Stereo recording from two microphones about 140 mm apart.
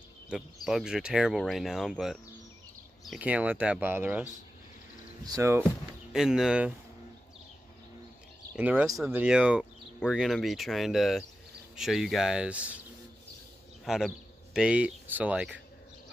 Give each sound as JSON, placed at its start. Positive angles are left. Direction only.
{"t": 0.3, "sound": "speech", "side_deg": -5}
{"t": 3.2, "sound": "speech", "side_deg": -10}
{"t": 6.1, "sound": "speech", "side_deg": -5}
{"t": 8.5, "sound": "speech", "side_deg": -10}
{"t": 8.8, "sound": "speech", "side_deg": 0}
{"t": 13.8, "sound": "speech", "side_deg": -5}